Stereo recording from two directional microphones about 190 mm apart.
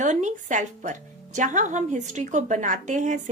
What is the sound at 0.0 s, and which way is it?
Speech, 40° right (ahead or behind).